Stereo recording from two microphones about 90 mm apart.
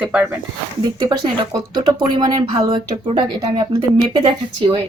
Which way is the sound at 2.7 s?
70° right (ahead or behind).